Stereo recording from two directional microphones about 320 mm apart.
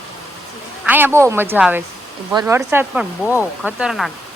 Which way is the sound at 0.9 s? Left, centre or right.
Centre.